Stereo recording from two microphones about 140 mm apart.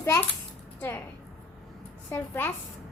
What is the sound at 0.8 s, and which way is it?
Speech, 15° left (ahead or behind).